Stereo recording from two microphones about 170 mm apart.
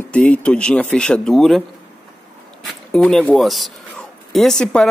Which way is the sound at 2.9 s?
5° left (ahead or behind).